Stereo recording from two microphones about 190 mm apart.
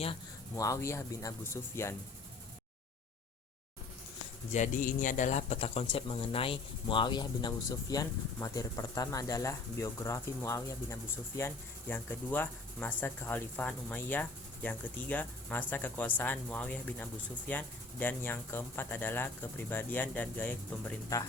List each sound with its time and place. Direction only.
0.5 s speech: 15° left (ahead or behind)
4.5 s a man's voice: 40° left (ahead or behind); by 21.2 s 15° left (ahead or behind)